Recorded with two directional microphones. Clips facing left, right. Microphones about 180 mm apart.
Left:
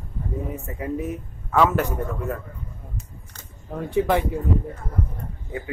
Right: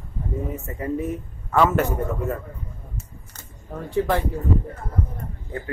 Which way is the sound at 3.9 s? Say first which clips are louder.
Left 1 dB; 15° left (ahead or behind).